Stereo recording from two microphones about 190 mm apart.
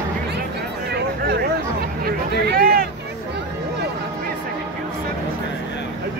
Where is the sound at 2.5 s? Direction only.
50° right (ahead or behind).